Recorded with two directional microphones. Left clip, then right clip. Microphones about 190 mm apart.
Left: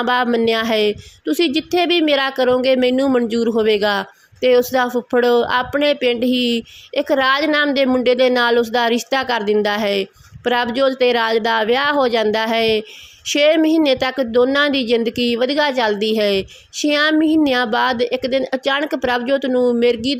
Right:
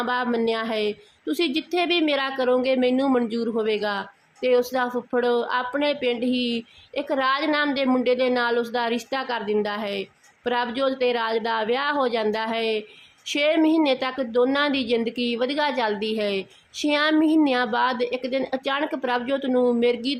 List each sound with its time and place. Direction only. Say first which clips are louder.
0.0 s a woman's voice: left 7 dB; 30° left (ahead or behind)